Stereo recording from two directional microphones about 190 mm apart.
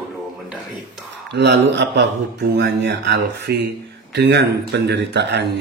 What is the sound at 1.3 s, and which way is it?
Speech, 65° right (ahead or behind).